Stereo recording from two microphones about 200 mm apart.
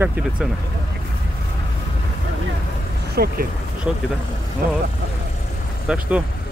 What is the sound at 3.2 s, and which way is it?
Speech, 50° right (ahead or behind).